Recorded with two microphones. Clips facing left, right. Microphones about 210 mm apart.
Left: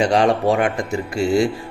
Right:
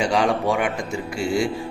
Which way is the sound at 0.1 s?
35° left (ahead or behind).